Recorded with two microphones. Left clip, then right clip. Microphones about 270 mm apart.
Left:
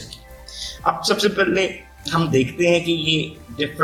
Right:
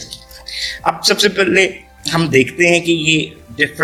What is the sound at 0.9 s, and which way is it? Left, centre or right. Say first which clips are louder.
A man's voice: right 5 dB; right.